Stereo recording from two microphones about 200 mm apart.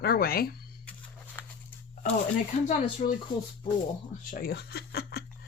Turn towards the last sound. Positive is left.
turn(degrees=50)  # may be behind; listen again after turning